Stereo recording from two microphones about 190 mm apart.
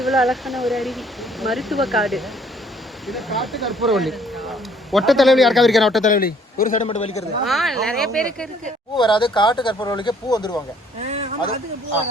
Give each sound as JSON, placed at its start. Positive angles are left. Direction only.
{"t": 0.0, "sound": "speech", "side_deg": 0}
{"t": 6.0, "sound": "a man's voice", "side_deg": 45}
{"t": 6.8, "sound": "a man's voice", "side_deg": 35}
{"t": 7.4, "sound": "speech", "side_deg": 0}
{"t": 9.0, "sound": "speech", "side_deg": 25}
{"t": 11.0, "sound": "a sound", "side_deg": -35}